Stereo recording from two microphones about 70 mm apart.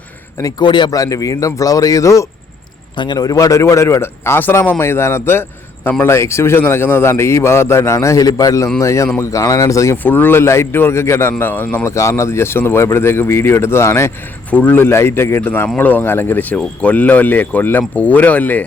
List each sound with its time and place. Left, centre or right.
0.8 s a man's voice: left
3.1 s a man's voice: left
3.3 s speech: left
4.8 s a man's voice: left
8.2 s a man's voice: left
9.9 s speech: left
11.9 s speech: left
14.5 s speech: left